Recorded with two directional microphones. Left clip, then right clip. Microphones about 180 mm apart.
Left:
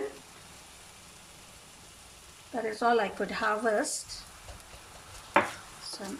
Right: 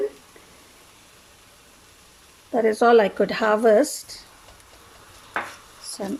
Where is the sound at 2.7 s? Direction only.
45° right (ahead or behind).